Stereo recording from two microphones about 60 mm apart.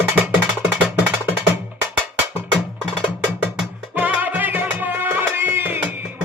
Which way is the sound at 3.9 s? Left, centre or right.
Right.